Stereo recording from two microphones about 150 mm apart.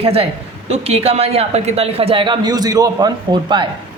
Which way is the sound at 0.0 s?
40° right (ahead or behind).